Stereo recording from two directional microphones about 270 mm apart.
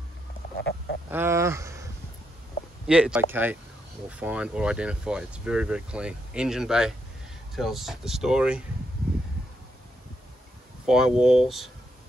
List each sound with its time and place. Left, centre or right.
0.6 s frog: left
1.1 s speech: centre
2.9 s speech: centre
10.9 s speech: centre